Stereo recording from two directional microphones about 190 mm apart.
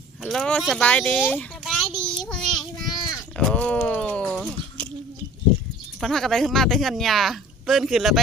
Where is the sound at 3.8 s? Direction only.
10° left (ahead or behind).